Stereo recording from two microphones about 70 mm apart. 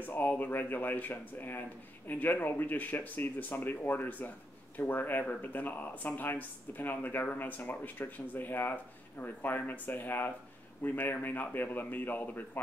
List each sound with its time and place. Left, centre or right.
0.0 s speech: left